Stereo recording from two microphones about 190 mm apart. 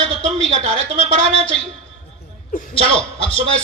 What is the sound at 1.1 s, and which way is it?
Music, 35° right (ahead or behind).